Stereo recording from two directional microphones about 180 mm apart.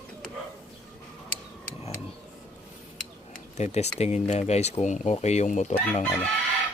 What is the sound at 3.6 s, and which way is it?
Speech, 40° left (ahead or behind).